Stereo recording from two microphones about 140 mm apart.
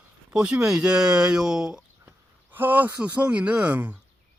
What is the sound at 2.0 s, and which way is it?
Speech, 15° right (ahead or behind).